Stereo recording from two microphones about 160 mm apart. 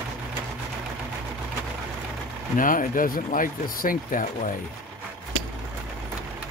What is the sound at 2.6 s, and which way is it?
Speech, 55° left (ahead or behind).